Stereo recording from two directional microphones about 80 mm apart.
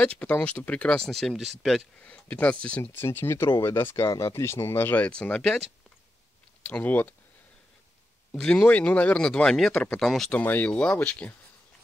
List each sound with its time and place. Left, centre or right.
0.0 s speech: centre
1.1 s speech: centre
2.0 s speech: centre
2.8 s speech: left
6.6 s speech: left
8.3 s speech: centre
10.3 s speech: left
10.7 s speech: centre